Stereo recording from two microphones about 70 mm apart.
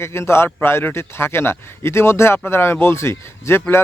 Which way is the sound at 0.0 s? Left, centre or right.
Left.